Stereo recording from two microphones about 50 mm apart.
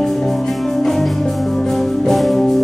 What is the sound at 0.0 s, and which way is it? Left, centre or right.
Music, centre.